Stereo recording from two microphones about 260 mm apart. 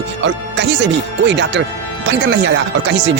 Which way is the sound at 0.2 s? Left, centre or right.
Right.